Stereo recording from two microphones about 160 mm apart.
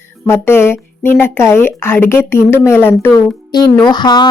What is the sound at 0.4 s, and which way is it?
A woman's voice, 15° left (ahead or behind).